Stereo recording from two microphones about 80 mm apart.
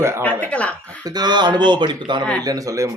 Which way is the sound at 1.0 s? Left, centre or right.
Right.